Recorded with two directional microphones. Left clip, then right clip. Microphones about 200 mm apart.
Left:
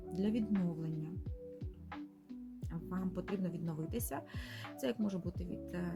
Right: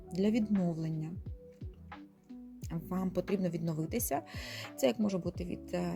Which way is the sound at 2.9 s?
30° right (ahead or behind).